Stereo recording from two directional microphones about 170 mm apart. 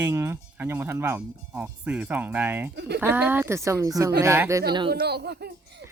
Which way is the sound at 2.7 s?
75° right (ahead or behind).